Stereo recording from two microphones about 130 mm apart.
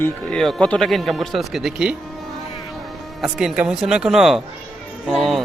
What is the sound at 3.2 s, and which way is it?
A man's voice, 5° right (ahead or behind).